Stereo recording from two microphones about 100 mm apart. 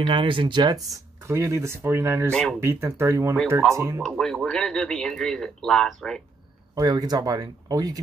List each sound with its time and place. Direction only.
0.0 s speech: 55° right (ahead or behind)
1.2 s speech: 25° right (ahead or behind)
4.0 s a man's voice: 5° left (ahead or behind)
6.7 s speech: 40° right (ahead or behind)